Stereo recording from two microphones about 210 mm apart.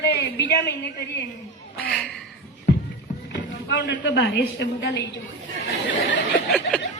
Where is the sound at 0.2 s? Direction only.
55° left (ahead or behind).